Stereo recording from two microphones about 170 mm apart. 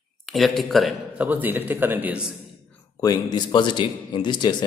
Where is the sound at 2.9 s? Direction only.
25° left (ahead or behind).